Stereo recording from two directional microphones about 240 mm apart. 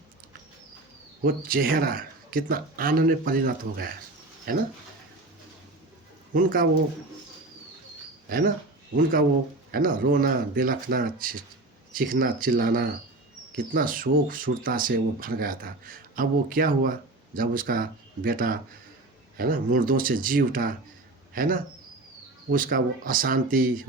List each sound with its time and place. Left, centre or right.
1.2 s speech: right
6.3 s speech: right
8.3 s speech: right
9.7 s speech: right